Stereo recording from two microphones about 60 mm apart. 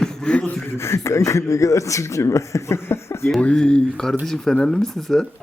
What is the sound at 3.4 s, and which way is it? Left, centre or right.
A man's voice, centre.